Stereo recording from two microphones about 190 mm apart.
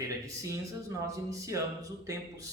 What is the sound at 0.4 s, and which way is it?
Speech, 15° right (ahead or behind).